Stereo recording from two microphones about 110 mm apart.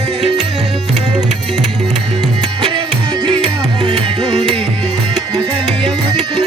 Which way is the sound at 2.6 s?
45° right (ahead or behind).